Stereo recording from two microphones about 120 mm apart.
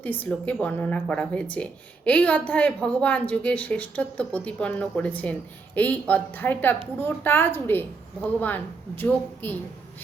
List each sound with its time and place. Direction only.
0.0 s a woman's voice: 15° left (ahead or behind)